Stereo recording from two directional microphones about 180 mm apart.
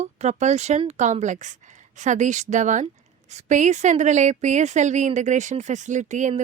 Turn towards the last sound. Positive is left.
turn(degrees=-40)  # may be behind; listen again after turning